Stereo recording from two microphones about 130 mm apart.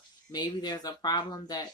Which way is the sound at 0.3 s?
30° left (ahead or behind).